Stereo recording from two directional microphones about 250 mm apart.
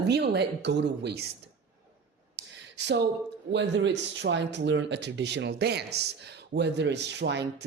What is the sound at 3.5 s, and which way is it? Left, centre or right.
Speech, right.